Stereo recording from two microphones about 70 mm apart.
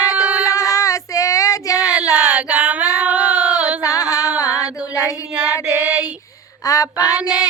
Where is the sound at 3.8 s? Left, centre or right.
Left.